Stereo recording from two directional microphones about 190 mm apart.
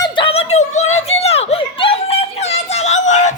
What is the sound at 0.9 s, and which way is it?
Children playing, 35° left (ahead or behind).